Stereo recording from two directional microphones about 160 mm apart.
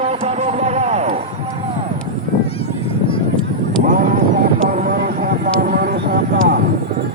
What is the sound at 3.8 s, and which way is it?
Vehicle, 55° right (ahead or behind).